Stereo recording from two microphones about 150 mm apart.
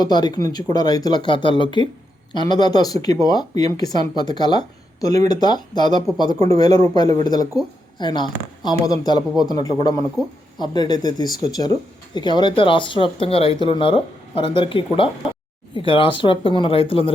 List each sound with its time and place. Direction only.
0.0 s speech: 30° left (ahead or behind)